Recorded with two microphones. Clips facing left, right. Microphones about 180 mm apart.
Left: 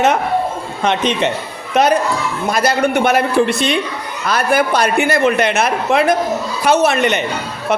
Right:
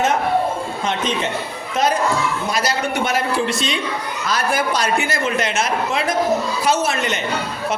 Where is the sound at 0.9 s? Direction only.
70° left (ahead or behind).